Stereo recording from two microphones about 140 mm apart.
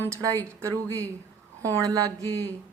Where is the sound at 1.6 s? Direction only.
25° right (ahead or behind).